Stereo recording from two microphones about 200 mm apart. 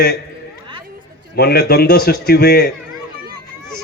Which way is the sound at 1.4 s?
50° left (ahead or behind).